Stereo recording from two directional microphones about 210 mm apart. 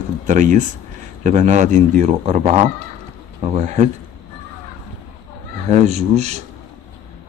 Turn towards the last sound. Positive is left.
turn(degrees=-30)  # may be behind; listen again after turning